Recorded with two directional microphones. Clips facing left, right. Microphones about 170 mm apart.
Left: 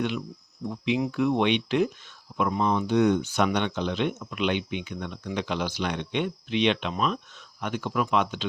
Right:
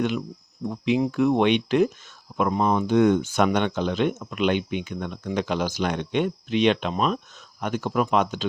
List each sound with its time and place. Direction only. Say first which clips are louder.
0.7 s speech: right 4 dB; 40° right (ahead or behind)